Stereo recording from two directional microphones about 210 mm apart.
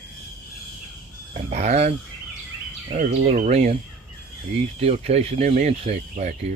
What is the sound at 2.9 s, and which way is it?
Speech, 35° right (ahead or behind).